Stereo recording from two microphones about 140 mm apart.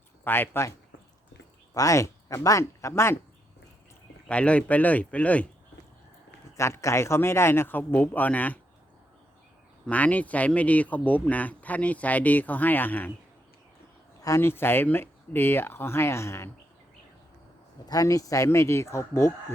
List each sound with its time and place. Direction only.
0.3 s speech: 15° left (ahead or behind)
1.7 s speech: 25° left (ahead or behind)
4.3 s speech: 10° left (ahead or behind)
6.6 s speech: 20° left (ahead or behind)
9.8 s speech: 10° left (ahead or behind)
14.2 s speech: 20° left (ahead or behind)
17.8 s speech: 25° left (ahead or behind)